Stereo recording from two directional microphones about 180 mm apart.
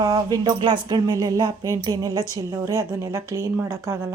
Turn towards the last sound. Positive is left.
turn(degrees=-15)  # may be behind; listen again after turning